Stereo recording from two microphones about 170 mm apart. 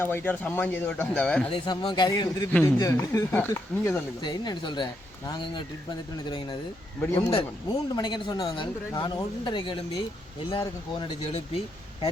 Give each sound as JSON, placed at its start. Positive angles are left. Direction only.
{"t": 0.0, "sound": "speech", "side_deg": 15}
{"t": 1.5, "sound": "speech", "side_deg": 30}
{"t": 2.5, "sound": "speech", "side_deg": 10}
{"t": 2.7, "sound": "speech", "side_deg": 20}
{"t": 4.2, "sound": "speech", "side_deg": 25}